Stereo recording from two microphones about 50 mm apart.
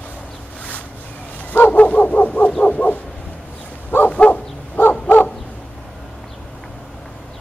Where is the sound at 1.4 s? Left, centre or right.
Left.